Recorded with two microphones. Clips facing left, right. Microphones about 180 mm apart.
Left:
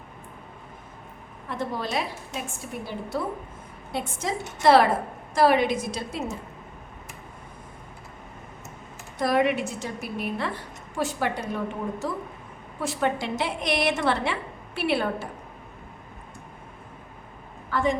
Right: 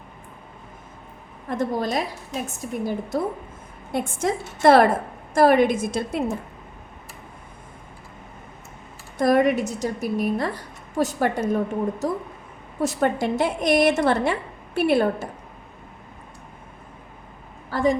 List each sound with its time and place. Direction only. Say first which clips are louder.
1.5 s a woman's voice: right 6 dB; 45° right (ahead or behind)
9.1 s a woman's voice: right 5 dB; 45° right (ahead or behind)
17.7 s a sound: right 4 dB; 35° right (ahead or behind)